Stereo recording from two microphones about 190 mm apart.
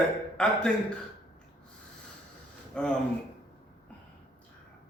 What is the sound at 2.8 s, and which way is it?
Speech, 5° left (ahead or behind).